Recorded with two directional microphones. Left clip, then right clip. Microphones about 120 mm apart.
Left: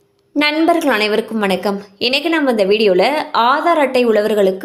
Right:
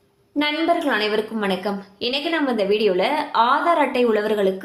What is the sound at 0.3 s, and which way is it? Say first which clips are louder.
A woman's voice: left 6 dB; 90° left.